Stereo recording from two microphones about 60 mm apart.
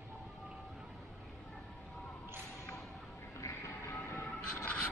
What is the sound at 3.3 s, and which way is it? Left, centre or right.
Music, left.